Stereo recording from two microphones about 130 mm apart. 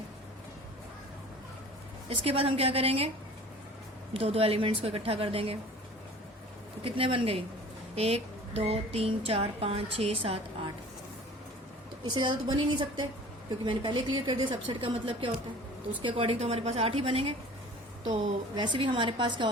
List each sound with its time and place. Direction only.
2.0 s a woman's voice: 50° right (ahead or behind)
4.1 s a woman's voice: 45° right (ahead or behind)
6.8 s a woman's voice: 45° right (ahead or behind)
12.0 s a woman's voice: 35° right (ahead or behind)
18.1 s a woman's voice: 35° right (ahead or behind)